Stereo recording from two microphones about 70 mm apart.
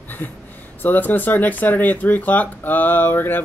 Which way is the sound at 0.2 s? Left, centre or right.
Left.